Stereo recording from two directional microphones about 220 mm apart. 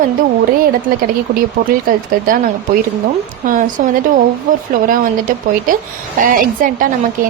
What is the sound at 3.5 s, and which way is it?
Speech, 35° right (ahead or behind).